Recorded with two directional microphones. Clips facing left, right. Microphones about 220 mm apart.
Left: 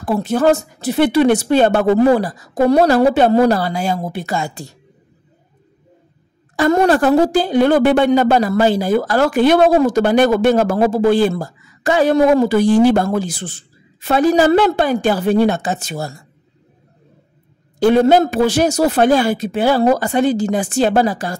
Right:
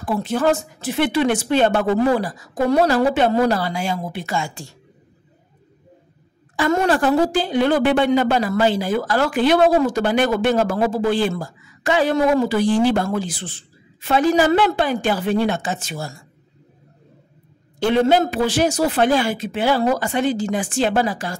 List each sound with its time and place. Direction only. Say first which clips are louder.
0.0 s a woman's voice: left 4 dB; 40° left (ahead or behind)
6.5 s a woman's voice: left 5 dB; 40° left (ahead or behind)
17.7 s a woman's voice: left 5 dB; 40° left (ahead or behind)